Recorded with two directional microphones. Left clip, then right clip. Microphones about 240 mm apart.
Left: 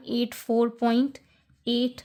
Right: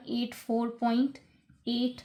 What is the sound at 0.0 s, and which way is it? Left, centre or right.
A woman's voice, left.